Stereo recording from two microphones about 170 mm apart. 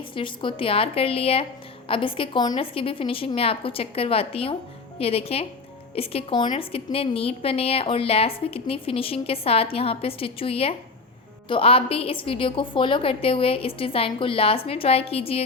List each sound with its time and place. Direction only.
0.1 s a woman's voice: 30° left (ahead or behind)